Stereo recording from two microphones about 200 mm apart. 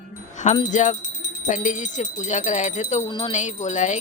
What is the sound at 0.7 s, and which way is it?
Speech, 35° left (ahead or behind).